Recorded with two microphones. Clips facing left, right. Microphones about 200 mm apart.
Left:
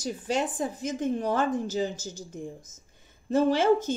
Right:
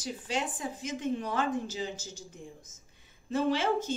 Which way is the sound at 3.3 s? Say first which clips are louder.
Left 6 dB; 45° left (ahead or behind).